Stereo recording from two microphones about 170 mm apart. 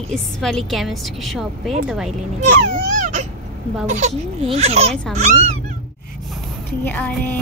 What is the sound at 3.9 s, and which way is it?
Speech, 40° right (ahead or behind).